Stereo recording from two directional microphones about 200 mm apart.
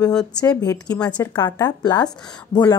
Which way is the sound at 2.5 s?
20° left (ahead or behind).